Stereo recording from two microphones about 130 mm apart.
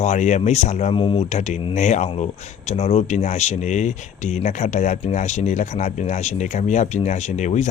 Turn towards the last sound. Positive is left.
turn(degrees=65)  # may be behind; listen again after turning